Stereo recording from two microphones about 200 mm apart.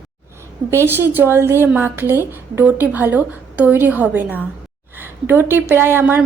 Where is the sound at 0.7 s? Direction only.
10° right (ahead or behind).